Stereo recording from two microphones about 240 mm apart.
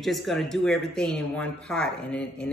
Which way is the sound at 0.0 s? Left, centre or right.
Centre.